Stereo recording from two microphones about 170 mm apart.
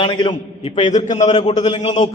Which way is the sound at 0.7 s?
45° left (ahead or behind).